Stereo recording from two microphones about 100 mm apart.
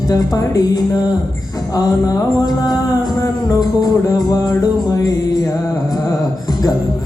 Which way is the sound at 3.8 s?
40° left (ahead or behind).